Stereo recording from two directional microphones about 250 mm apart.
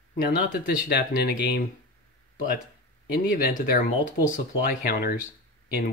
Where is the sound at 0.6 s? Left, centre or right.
Left.